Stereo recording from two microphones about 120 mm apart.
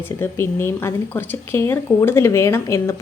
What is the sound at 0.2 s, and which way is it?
Speech, 20° left (ahead or behind).